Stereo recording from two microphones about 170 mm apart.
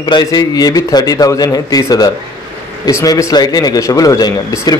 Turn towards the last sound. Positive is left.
turn(degrees=20)  # may be behind; listen again after turning